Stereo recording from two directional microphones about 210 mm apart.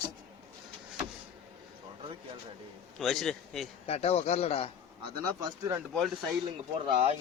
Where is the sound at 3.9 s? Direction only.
30° left (ahead or behind).